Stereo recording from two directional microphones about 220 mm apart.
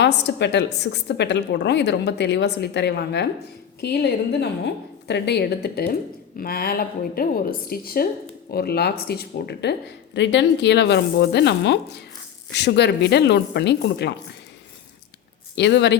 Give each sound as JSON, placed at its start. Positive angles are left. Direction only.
{"t": 0.0, "sound": "a woman's voice", "side_deg": 50}
{"t": 15.5, "sound": "a woman's voice", "side_deg": 50}